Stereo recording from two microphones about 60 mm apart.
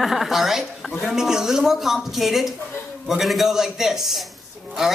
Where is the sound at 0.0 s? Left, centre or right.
Centre.